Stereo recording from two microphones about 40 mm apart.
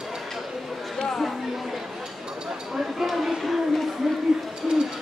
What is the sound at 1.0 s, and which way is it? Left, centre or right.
Chatter, centre.